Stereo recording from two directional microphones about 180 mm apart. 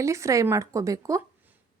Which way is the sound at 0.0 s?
15° right (ahead or behind).